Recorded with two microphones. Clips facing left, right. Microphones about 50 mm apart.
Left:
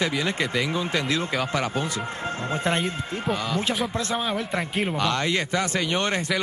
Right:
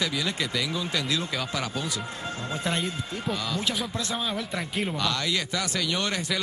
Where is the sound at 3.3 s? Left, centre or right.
Centre.